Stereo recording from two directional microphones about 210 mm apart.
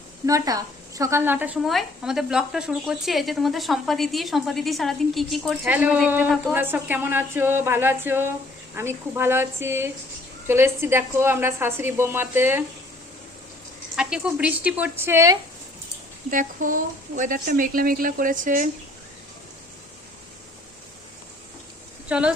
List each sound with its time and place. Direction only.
0.3 s a woman's voice: 15° right (ahead or behind)
13.9 s a woman's voice: 5° right (ahead or behind)
16.3 s a woman's voice: 40° right (ahead or behind)
22.1 s a woman's voice: 5° right (ahead or behind)